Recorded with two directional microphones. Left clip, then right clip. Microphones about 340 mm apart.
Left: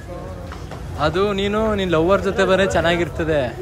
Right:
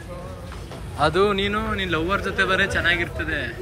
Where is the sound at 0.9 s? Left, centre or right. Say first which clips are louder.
Even; centre.